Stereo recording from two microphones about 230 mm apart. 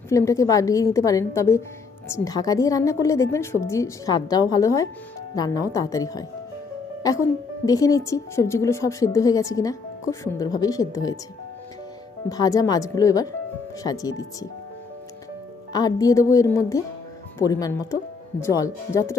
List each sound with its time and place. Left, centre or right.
0.1 s a woman's voice: centre
12.3 s a woman's voice: centre
15.7 s a woman's voice: centre